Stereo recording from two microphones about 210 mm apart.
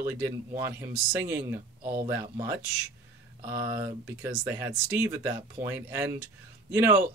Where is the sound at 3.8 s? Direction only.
10° right (ahead or behind).